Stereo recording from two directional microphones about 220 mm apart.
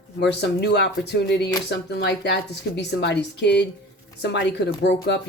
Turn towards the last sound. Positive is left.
turn(degrees=50)  # may be behind; listen again after turning